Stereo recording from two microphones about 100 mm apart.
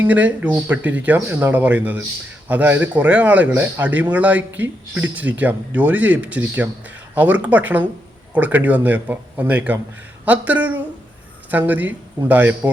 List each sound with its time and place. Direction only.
0.0 s speech: 15° right (ahead or behind)